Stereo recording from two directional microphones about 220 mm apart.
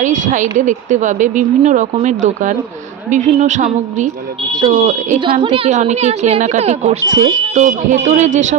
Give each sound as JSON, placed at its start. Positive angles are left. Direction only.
{"t": 0.0, "sound": "a woman's voice", "side_deg": -35}